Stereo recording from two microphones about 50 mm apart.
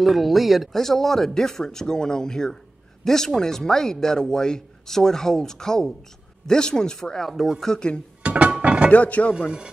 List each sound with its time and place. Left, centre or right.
0.0 s speech: centre
7.6 s speech: centre
8.2 s a sound: right
8.9 s speech: left